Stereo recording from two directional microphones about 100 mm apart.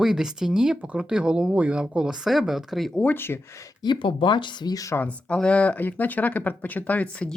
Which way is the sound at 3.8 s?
55° left (ahead or behind).